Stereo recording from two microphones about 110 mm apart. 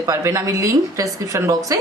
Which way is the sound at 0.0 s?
30° right (ahead or behind).